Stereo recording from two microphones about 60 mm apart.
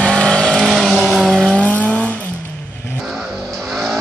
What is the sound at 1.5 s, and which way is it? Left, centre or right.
Vehicle, left.